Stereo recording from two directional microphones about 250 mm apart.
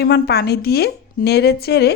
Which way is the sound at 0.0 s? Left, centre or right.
Left.